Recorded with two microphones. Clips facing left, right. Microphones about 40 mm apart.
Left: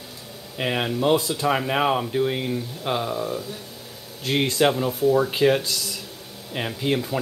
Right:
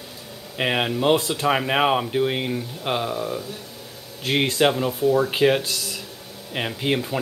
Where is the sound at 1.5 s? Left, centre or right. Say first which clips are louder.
Right 2 dB; right.